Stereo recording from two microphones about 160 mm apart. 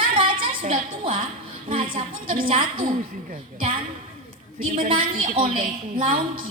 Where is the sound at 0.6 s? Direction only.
55° right (ahead or behind).